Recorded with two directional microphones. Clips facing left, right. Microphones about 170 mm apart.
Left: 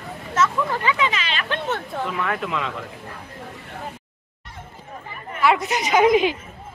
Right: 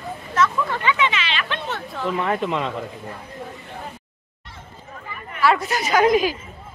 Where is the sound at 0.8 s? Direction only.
35° left (ahead or behind).